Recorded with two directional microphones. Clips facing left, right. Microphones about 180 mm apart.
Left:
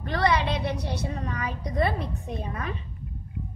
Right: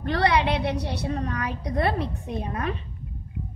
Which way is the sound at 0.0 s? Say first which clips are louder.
Right 2 dB; 70° right (ahead or behind).